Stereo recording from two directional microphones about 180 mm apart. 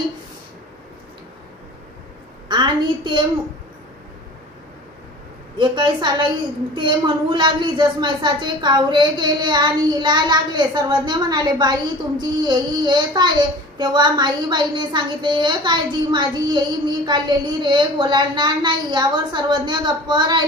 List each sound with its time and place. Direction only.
2.4 s a woman's voice: 25° right (ahead or behind)
5.6 s speech: 25° right (ahead or behind)